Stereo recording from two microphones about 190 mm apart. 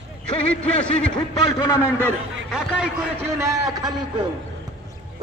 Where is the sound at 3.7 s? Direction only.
20° right (ahead or behind).